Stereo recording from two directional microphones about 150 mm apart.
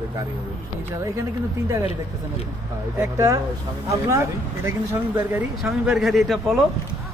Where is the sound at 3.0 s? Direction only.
20° right (ahead or behind).